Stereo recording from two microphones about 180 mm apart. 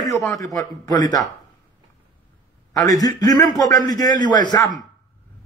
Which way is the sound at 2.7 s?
20° left (ahead or behind).